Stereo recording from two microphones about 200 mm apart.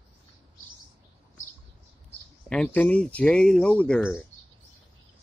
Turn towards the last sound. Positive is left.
turn(degrees=5)  # may be behind; listen again after turning